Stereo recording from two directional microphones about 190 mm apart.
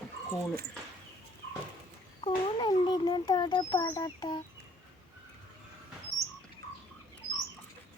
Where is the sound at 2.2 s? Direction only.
25° left (ahead or behind).